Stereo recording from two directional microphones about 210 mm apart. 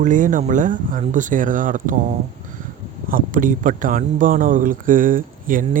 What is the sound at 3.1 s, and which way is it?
Speech, 40° right (ahead or behind).